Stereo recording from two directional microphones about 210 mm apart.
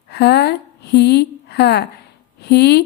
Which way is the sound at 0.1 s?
50° left (ahead or behind).